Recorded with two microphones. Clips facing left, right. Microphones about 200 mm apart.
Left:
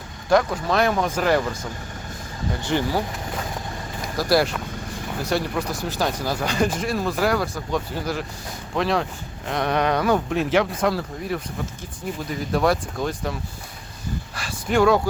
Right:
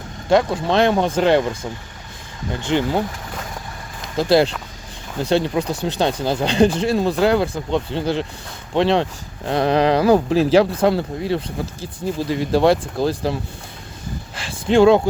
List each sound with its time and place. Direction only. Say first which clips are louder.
0.3 s speech: right 3 dB; 25° right (ahead or behind)
2.6 s speech: right 4 dB; 20° right (ahead or behind)
4.2 s speech: right 5 dB; 25° right (ahead or behind)
14.3 s a sound: right 6 dB; 25° right (ahead or behind)